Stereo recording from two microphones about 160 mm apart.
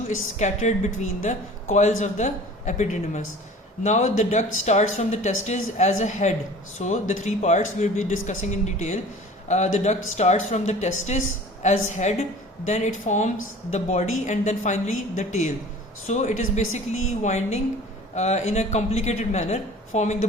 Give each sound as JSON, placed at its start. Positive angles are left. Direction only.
{"t": 0.3, "sound": "a woman's voice", "side_deg": 45}